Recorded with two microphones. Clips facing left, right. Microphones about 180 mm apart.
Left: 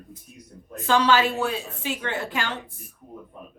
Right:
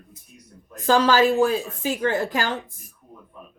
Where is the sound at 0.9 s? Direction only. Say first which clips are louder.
Right 3 dB; 40° right (ahead or behind).